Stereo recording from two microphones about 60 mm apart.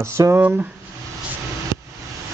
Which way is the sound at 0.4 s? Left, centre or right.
Right.